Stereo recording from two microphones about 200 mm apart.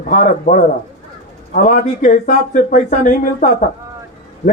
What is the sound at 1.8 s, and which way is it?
A man's voice, 40° left (ahead or behind).